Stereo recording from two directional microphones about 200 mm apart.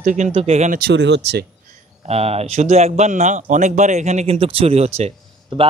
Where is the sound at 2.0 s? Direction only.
30° right (ahead or behind).